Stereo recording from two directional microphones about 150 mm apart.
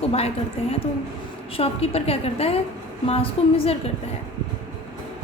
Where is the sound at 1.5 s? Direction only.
40° left (ahead or behind).